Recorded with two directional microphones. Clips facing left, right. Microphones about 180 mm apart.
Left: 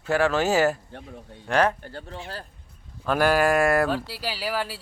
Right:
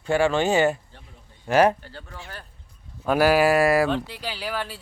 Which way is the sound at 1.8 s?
50° left (ahead or behind).